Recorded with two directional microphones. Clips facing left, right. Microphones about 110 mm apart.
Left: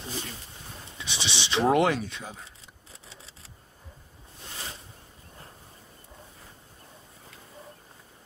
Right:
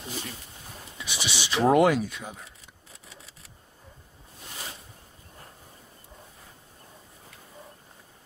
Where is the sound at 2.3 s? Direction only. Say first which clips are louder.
Even; 30° left (ahead or behind).